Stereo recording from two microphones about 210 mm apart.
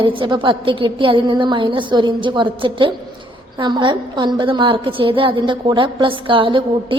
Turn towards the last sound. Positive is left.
turn(degrees=-25)  # may be behind; listen again after turning